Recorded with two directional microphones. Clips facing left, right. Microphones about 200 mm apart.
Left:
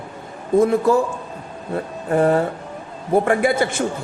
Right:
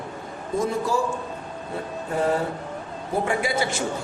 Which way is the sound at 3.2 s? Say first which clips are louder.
Left 6 dB; 55° left (ahead or behind).